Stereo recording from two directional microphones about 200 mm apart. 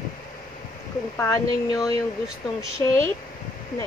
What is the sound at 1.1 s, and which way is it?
Speech, 15° left (ahead or behind).